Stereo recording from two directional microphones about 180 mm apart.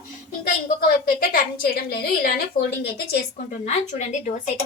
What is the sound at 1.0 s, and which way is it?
A woman's voice, 55° left (ahead or behind).